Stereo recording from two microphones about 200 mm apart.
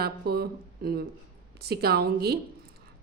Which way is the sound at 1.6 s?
50° right (ahead or behind).